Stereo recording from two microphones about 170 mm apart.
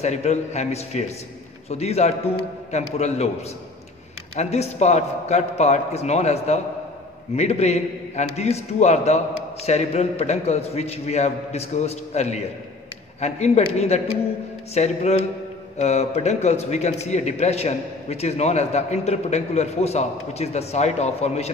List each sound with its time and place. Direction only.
0.0 s speech: 40° left (ahead or behind)
4.4 s speech: 40° left (ahead or behind)